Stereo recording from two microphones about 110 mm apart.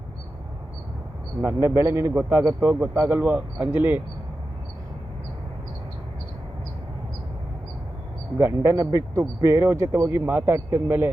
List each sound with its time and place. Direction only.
1.4 s speech: 25° right (ahead or behind)
8.4 s speech: 25° right (ahead or behind)